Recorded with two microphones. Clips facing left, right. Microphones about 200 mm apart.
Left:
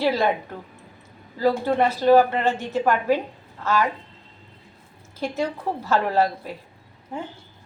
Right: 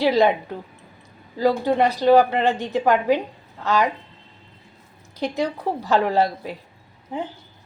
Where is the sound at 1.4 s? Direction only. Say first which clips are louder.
Right 2 dB; 15° right (ahead or behind).